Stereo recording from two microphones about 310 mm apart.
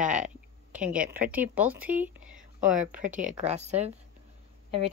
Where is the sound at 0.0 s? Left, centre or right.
Centre.